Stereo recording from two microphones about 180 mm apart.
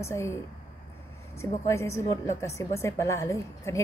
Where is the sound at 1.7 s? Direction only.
15° left (ahead or behind).